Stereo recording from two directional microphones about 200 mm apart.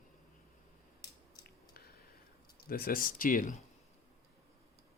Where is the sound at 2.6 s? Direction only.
50° left (ahead or behind).